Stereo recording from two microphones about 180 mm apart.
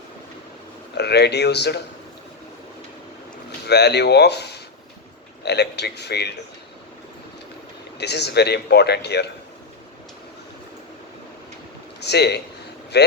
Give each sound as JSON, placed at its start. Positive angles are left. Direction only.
{"t": 0.9, "sound": "speech", "side_deg": 65}
{"t": 3.7, "sound": "speech", "side_deg": 65}
{"t": 7.9, "sound": "speech", "side_deg": 65}
{"t": 11.9, "sound": "speech", "side_deg": 65}